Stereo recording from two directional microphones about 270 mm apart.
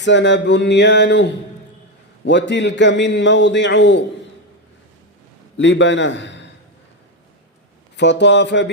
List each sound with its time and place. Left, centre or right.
0.0 s a man's voice: left
5.5 s a man's voice: left
7.9 s a man's voice: left